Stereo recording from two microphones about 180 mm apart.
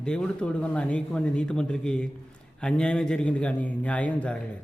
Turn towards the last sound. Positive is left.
turn(degrees=5)  # may be behind; listen again after turning